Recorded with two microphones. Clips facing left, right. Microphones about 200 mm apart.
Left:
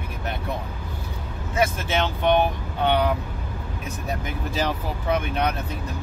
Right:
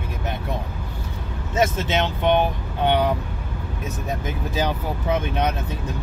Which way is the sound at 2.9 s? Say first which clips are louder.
Right 1 dB; 15° right (ahead or behind).